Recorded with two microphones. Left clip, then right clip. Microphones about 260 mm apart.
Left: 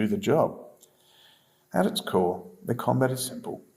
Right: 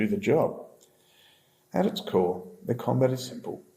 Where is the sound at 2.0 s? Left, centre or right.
Left.